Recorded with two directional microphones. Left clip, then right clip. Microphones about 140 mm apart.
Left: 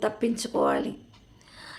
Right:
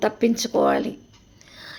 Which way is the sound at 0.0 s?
35° right (ahead or behind).